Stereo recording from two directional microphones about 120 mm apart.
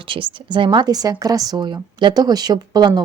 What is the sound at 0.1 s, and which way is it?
A woman's voice, 45° right (ahead or behind).